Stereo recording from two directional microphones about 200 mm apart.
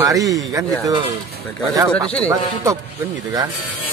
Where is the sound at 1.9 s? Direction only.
5° left (ahead or behind).